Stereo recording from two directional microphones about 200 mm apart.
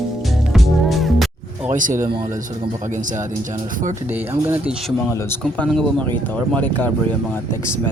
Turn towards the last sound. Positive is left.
turn(degrees=10)  # may be behind; listen again after turning